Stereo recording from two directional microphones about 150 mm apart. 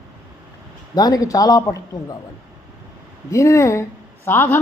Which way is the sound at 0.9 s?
25° left (ahead or behind).